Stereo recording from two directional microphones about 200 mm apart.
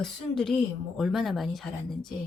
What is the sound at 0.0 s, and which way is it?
A woman's voice, centre (ahead or behind).